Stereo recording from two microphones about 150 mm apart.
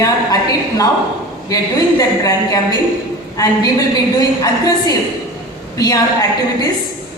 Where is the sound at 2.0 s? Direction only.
25° left (ahead or behind).